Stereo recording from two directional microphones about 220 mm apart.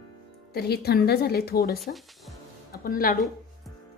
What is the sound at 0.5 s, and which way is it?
A woman's voice, 45° left (ahead or behind).